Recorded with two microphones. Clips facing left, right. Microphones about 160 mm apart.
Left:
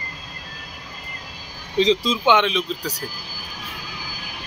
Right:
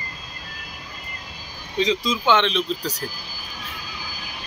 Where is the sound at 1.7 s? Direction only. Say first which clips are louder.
Left 4 dB; 30° left (ahead or behind).